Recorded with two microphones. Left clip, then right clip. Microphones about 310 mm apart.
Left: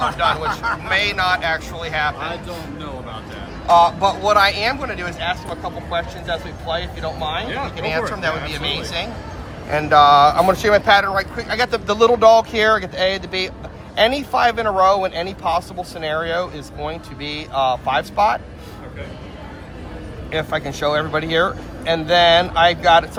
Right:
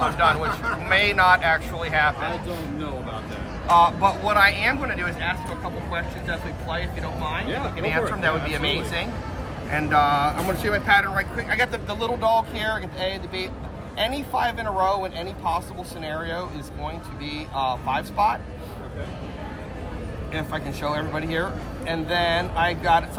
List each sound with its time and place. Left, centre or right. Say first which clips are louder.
0.2 s speech: left 2 dB; centre
3.7 s speech: left 4 dB; centre
20.3 s speech: left 8 dB; centre